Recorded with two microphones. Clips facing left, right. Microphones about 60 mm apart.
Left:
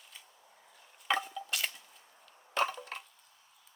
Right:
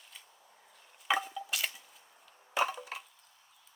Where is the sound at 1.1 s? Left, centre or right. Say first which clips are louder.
Right 1 dB; centre.